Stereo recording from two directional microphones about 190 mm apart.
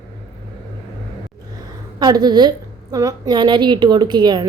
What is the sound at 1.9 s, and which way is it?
A woman's voice, 20° right (ahead or behind).